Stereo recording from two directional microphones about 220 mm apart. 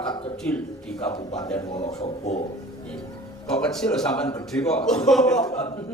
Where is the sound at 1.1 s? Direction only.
25° left (ahead or behind).